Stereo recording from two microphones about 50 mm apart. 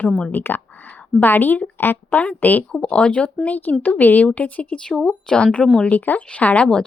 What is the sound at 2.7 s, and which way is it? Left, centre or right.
Speech, left.